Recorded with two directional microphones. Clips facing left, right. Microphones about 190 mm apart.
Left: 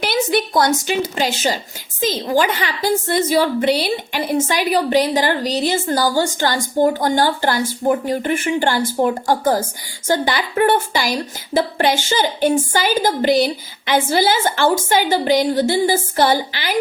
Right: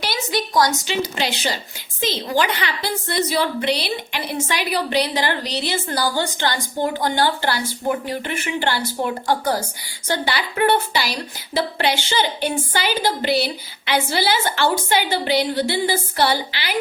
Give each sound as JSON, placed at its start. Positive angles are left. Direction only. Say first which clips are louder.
{"t": 0.0, "sound": "a woman's voice", "louder": "left 6 dB", "side_deg": 55}